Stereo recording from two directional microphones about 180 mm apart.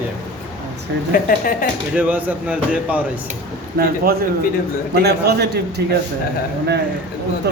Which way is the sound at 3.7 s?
60° right (ahead or behind).